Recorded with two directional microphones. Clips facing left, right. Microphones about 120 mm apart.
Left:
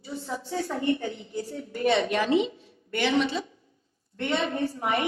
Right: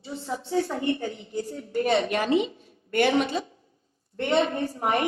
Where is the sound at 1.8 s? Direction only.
45° right (ahead or behind).